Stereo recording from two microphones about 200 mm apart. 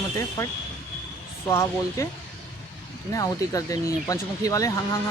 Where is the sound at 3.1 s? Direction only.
15° left (ahead or behind).